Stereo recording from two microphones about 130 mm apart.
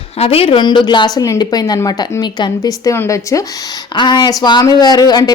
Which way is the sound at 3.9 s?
35° left (ahead or behind).